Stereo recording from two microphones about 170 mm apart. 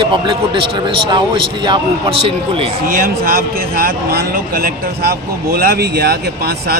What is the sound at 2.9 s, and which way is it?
A man's voice, 60° right (ahead or behind).